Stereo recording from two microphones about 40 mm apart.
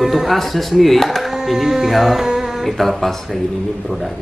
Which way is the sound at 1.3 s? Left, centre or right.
Centre.